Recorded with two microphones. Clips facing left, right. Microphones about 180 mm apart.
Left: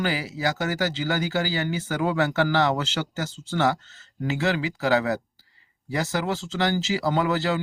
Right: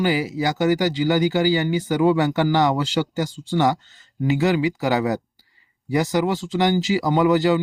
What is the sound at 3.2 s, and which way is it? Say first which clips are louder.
Speech: right 2 dB; 15° right (ahead or behind).